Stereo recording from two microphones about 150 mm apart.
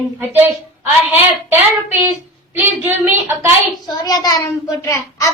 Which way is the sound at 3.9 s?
25° left (ahead or behind).